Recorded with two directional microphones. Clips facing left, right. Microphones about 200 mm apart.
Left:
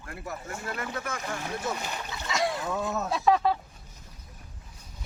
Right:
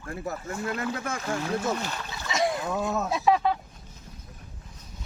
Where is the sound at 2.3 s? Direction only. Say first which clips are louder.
Right 2 dB; 20° right (ahead or behind).